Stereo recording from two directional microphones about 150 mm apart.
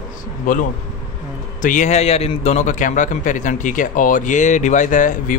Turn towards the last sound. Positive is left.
turn(degrees=60)  # may be behind; listen again after turning